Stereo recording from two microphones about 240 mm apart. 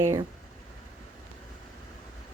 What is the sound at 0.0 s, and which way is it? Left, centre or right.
Speech, centre.